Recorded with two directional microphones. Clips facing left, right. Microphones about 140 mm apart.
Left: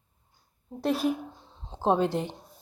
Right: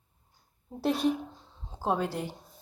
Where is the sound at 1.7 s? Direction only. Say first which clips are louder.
Left 5 dB; 25° left (ahead or behind).